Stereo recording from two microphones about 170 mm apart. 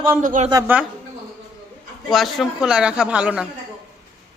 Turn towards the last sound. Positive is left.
turn(degrees=-5)  # may be behind; listen again after turning